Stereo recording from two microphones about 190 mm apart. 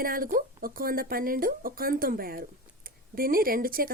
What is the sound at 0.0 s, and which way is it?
Speech, 50° right (ahead or behind).